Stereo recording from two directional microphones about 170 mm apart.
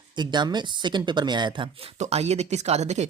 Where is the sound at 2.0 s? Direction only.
40° right (ahead or behind).